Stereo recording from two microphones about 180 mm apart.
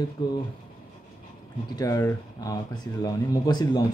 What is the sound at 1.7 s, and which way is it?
Speech, 20° left (ahead or behind).